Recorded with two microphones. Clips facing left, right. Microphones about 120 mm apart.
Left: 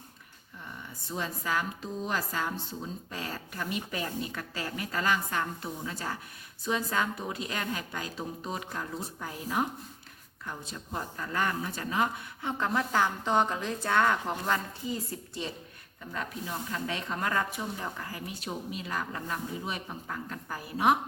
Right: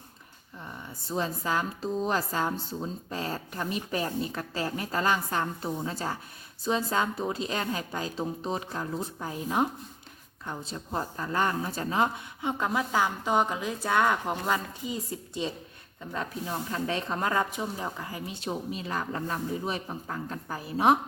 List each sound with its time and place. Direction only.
1.1 s a woman's voice: 30° right (ahead or behind)
12.4 s a woman's voice: 15° right (ahead or behind)
16.1 s a woman's voice: 35° right (ahead or behind)